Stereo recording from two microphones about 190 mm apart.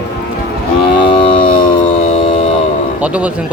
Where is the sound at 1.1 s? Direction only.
25° left (ahead or behind).